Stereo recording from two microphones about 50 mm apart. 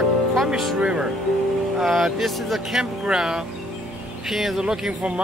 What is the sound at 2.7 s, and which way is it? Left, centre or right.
Speech, centre.